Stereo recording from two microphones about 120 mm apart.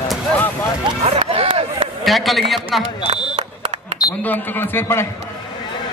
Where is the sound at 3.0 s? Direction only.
65° right (ahead or behind).